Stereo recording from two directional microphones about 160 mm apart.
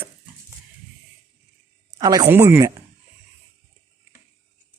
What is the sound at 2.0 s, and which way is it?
Speech, 20° right (ahead or behind).